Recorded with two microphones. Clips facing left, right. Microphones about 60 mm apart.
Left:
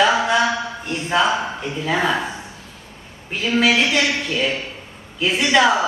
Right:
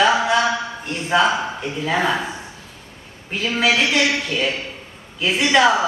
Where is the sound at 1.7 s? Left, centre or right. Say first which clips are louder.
Even; centre.